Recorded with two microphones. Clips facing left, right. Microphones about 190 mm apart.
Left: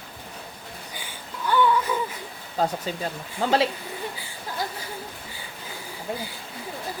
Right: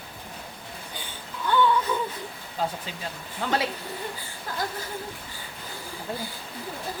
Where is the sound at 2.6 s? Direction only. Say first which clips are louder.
Left 4 dB; 40° left (ahead or behind).